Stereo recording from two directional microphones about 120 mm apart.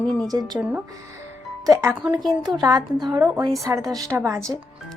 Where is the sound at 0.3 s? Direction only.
35° right (ahead or behind).